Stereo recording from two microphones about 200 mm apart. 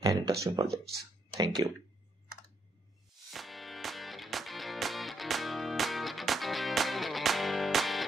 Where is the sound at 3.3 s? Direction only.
Centre (ahead or behind).